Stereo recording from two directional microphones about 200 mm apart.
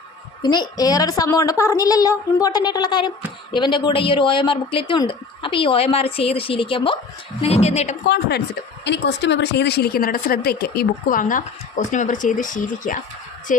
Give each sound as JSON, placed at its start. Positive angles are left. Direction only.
{"t": 0.4, "sound": "a woman's voice", "side_deg": 20}
{"t": 8.0, "sound": "a woman's voice", "side_deg": 55}